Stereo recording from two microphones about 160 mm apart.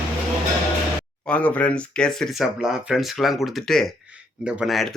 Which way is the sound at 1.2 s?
10° left (ahead or behind).